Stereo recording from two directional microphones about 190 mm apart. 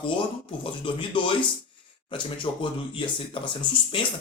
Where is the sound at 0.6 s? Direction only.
25° left (ahead or behind).